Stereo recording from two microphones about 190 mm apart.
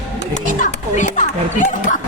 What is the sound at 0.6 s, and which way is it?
Speech, 40° left (ahead or behind).